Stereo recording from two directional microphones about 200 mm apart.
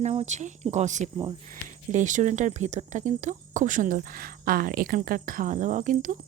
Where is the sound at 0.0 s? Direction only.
30° right (ahead or behind).